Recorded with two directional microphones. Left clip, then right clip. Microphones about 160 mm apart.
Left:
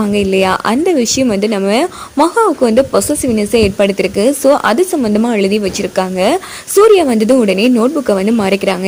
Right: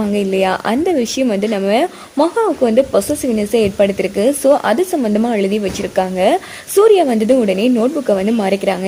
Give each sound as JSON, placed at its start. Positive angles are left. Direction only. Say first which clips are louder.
{"t": 0.0, "sound": "a woman's voice", "louder": "left 3 dB", "side_deg": 25}